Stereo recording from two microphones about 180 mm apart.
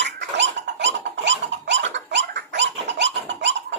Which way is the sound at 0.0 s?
85° right.